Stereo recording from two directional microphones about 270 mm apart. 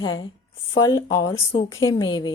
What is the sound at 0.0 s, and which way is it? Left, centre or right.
A woman's voice, centre.